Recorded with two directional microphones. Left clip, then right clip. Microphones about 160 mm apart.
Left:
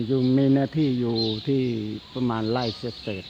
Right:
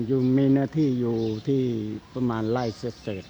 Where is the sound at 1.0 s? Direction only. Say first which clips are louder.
Left 1 dB; 25° left (ahead or behind).